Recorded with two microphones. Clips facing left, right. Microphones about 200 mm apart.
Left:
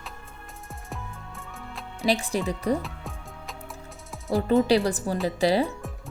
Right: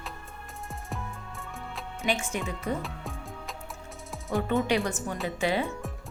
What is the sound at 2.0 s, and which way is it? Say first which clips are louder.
Speech: left 5 dB; 35° left (ahead or behind).